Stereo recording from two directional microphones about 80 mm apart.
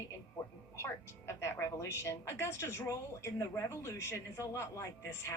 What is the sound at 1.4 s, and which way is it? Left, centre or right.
A woman's voice, left.